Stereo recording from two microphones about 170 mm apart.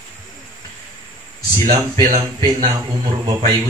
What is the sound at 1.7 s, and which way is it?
Speech, 30° right (ahead or behind).